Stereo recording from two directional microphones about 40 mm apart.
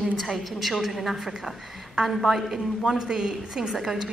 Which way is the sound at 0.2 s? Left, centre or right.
Centre.